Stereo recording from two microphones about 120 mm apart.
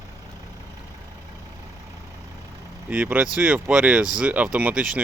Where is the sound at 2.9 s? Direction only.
10° right (ahead or behind).